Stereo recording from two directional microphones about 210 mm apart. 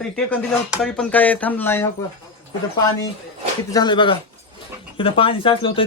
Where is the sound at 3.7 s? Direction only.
20° left (ahead or behind).